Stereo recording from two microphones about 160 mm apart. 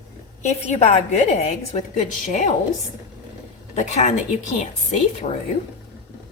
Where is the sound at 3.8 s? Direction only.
45° left (ahead or behind).